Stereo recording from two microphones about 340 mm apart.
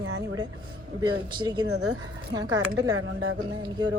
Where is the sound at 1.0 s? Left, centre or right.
Centre.